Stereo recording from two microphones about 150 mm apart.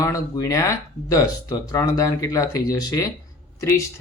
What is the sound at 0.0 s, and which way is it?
Speech, 25° left (ahead or behind).